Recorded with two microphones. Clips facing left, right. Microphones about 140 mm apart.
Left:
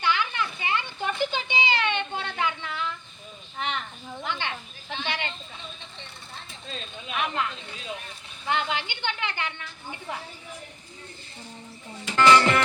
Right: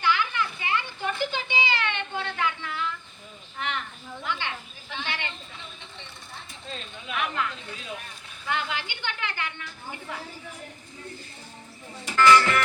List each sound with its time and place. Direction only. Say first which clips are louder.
0.0 s children playing: right 1 dB; 20° left (ahead or behind)
3.6 s a sound: left 1 dB; 20° left (ahead or behind)
6.7 s a woman's voice: even; 20° left (ahead or behind)
12.1 s music: even; 25° left (ahead or behind)